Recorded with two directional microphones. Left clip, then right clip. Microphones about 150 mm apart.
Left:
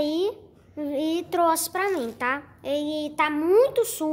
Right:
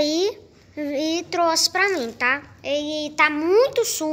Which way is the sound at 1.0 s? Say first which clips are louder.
Right 1 dB; 20° left (ahead or behind).